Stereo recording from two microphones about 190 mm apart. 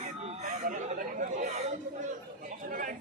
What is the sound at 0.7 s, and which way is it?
Chatter, 40° right (ahead or behind).